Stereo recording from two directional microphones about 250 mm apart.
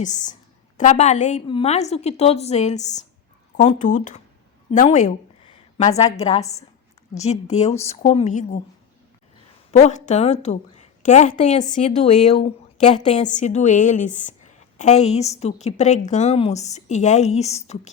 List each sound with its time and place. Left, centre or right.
0.0 s a woman's voice: left
4.7 s a sound: left
6.1 s a woman's voice: left
9.7 s a woman's voice: left